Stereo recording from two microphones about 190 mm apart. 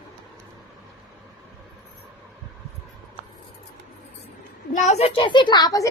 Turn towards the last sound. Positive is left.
turn(degrees=20)  # may be behind; listen again after turning